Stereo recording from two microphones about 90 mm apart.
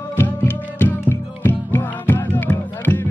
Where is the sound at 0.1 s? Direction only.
25° left (ahead or behind).